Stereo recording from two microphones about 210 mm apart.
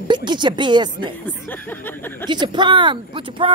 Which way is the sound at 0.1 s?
20° right (ahead or behind).